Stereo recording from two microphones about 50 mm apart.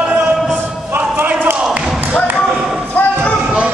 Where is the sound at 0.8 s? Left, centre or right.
Right.